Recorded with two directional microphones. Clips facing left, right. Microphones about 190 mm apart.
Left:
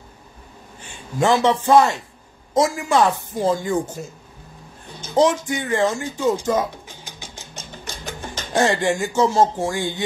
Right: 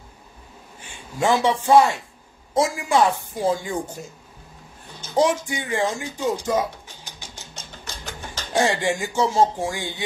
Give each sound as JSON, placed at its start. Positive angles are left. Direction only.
{"t": 1.2, "sound": "speech", "side_deg": -10}
{"t": 5.2, "sound": "speech", "side_deg": -15}
{"t": 7.2, "sound": "a sound", "side_deg": 15}
{"t": 8.5, "sound": "speech", "side_deg": -15}